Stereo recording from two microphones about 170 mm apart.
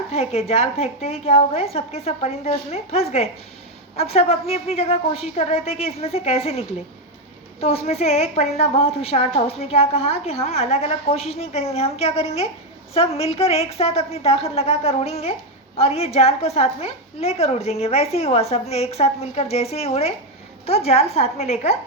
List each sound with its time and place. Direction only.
0.1 s a woman's voice: 40° left (ahead or behind)